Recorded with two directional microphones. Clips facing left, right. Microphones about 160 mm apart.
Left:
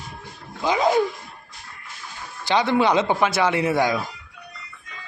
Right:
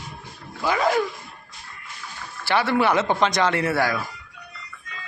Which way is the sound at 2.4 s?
15° left (ahead or behind).